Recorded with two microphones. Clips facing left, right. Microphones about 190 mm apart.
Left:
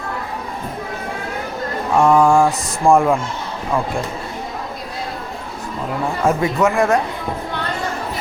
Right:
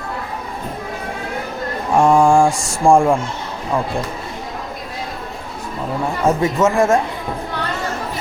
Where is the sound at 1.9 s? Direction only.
30° right (ahead or behind).